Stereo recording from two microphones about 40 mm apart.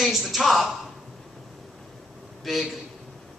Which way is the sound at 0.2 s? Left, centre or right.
Centre.